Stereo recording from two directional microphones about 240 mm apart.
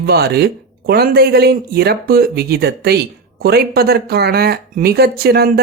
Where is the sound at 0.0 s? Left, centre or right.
Right.